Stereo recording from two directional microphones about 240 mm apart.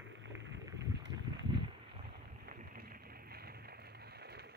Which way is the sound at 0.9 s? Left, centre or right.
Right.